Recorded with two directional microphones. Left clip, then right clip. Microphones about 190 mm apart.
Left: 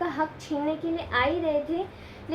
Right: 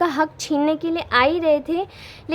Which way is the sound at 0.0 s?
55° right (ahead or behind).